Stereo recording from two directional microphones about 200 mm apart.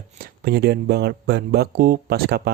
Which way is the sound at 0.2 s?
50° right (ahead or behind).